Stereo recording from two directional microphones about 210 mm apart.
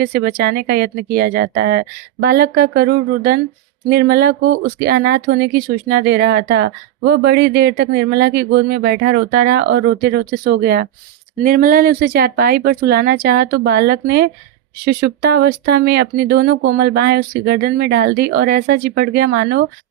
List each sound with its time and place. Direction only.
0.0 s speech: 50° right (ahead or behind)